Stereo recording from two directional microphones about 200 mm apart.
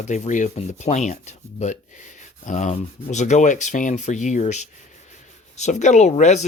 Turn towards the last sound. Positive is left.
turn(degrees=35)  # may be behind; listen again after turning